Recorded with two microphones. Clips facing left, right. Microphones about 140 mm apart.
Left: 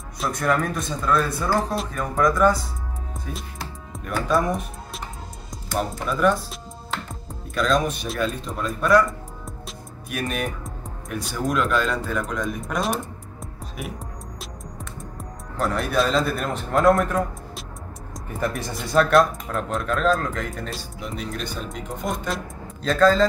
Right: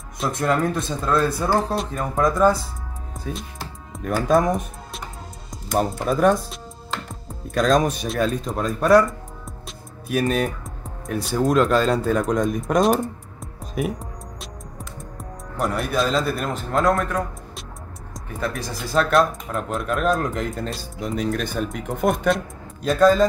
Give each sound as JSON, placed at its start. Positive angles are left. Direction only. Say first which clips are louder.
{"t": 0.3, "sound": "speech", "louder": "right 2 dB", "side_deg": -25}
{"t": 4.0, "sound": "speech", "louder": "right 4 dB", "side_deg": -45}
{"t": 5.8, "sound": "speech", "louder": "right 4 dB", "side_deg": -40}
{"t": 7.5, "sound": "speech", "louder": "right 3 dB", "side_deg": -40}
{"t": 10.0, "sound": "speech", "louder": "right 6 dB", "side_deg": -35}
{"t": 15.5, "sound": "speech", "louder": "even", "side_deg": -10}
{"t": 21.0, "sound": "speech", "louder": "right 8 dB", "side_deg": -45}
{"t": 22.8, "sound": "speech", "louder": "right 2 dB", "side_deg": -15}